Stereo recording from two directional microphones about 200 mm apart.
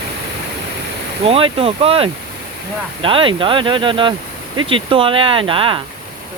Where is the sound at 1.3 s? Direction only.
30° right (ahead or behind).